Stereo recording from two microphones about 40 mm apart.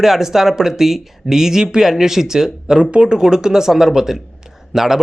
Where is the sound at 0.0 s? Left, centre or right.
Centre.